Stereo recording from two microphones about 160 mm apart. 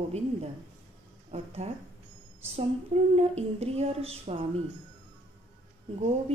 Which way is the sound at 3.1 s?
40° right (ahead or behind).